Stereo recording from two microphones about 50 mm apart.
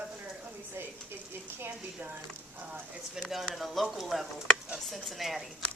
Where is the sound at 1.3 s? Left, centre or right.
Right.